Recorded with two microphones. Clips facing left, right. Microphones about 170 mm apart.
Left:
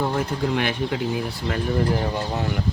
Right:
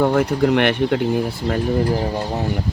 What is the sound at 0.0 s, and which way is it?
Speech, 65° right (ahead or behind).